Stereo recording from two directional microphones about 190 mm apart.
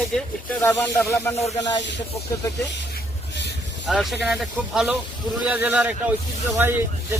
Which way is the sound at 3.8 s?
Centre (ahead or behind).